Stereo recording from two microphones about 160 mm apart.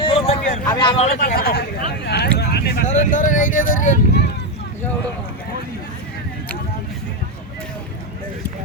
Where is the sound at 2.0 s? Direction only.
90° left.